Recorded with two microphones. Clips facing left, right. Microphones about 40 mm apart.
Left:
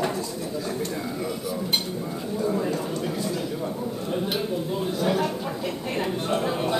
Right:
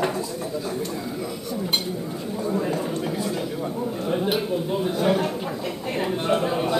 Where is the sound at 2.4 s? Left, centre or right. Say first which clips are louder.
Even; centre.